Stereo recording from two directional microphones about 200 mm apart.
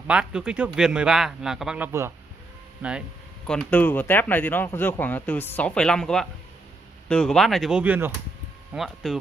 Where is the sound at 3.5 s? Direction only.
5° left (ahead or behind).